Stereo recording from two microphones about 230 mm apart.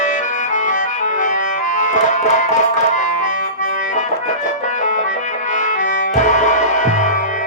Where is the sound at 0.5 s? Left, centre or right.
Left.